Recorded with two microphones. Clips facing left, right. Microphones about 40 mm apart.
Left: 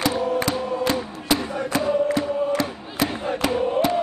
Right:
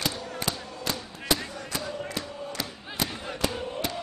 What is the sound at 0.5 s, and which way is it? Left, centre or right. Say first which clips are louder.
Music: left 11 dB; left.